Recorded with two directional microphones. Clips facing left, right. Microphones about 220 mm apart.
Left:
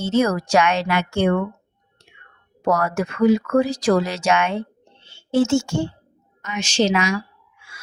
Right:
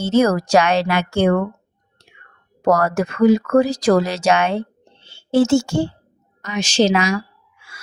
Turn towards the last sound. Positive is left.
turn(degrees=-35)  # may be behind; listen again after turning